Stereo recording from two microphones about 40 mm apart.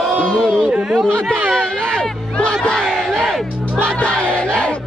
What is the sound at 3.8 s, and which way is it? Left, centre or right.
Music, left.